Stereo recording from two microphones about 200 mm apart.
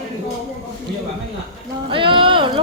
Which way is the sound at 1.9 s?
25° right (ahead or behind).